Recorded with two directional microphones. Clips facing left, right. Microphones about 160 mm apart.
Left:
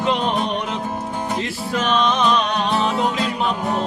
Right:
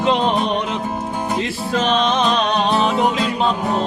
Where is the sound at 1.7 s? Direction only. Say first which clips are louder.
Right 2 dB; 25° right (ahead or behind).